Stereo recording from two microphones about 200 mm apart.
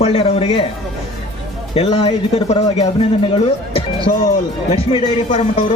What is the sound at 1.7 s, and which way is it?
A man's voice, 30° left (ahead or behind).